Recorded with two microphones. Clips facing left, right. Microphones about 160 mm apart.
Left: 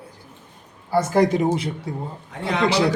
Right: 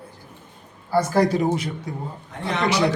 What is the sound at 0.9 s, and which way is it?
Speech, 20° left (ahead or behind).